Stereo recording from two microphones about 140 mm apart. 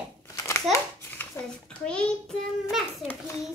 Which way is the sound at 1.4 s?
20° left (ahead or behind).